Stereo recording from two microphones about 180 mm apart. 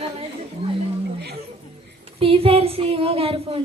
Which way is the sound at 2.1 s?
30° right (ahead or behind).